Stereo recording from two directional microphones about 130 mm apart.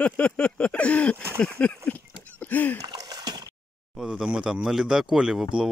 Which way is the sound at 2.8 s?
30° right (ahead or behind).